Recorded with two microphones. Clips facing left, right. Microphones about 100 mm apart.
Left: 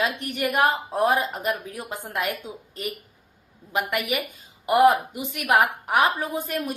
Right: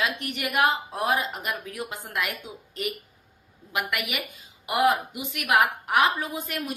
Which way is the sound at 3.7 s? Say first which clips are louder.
Left 4 dB; 45° left (ahead or behind).